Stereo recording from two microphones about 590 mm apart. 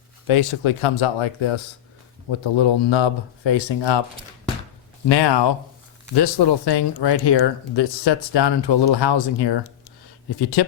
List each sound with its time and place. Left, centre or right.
0.3 s speech: left
5.0 s speech: left